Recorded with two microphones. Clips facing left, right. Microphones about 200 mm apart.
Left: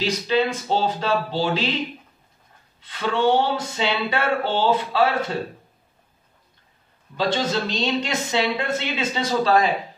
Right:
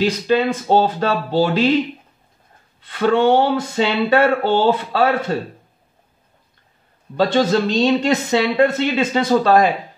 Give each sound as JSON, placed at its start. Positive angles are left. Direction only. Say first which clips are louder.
{"t": 0.0, "sound": "speech", "louder": "right 4 dB", "side_deg": -55}
{"t": 2.8, "sound": "speech", "louder": "right 6 dB", "side_deg": -55}
{"t": 7.2, "sound": "speech", "louder": "right 7 dB", "side_deg": -50}